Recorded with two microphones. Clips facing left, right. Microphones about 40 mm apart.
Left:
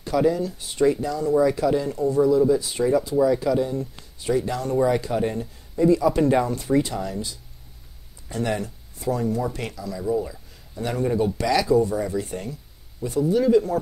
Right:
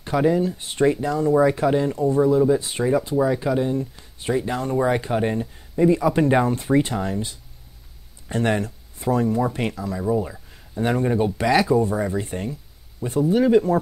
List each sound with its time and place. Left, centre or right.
0.0 s speech: right